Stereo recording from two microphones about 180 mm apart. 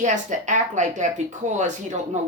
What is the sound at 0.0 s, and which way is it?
A woman's voice, 40° right (ahead or behind).